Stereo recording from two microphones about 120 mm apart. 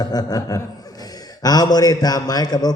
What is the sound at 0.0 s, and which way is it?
A man's voice, 35° left (ahead or behind).